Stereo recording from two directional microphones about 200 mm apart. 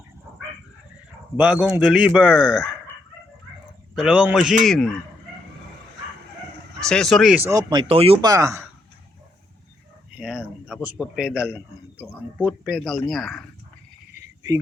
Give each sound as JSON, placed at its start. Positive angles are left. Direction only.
{"t": 1.4, "sound": "a man's voice", "side_deg": -5}
{"t": 3.9, "sound": "a man's voice", "side_deg": -5}
{"t": 6.7, "sound": "a man's voice", "side_deg": 5}
{"t": 7.7, "sound": "speech", "side_deg": -25}
{"t": 8.3, "sound": "speech", "side_deg": -15}
{"t": 10.2, "sound": "a man's voice", "side_deg": -5}